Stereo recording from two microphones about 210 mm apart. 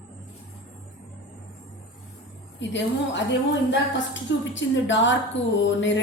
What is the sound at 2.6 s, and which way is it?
Speech, 60° left (ahead or behind).